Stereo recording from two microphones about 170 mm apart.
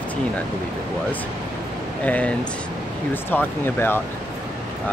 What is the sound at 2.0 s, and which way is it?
Speech, 10° left (ahead or behind).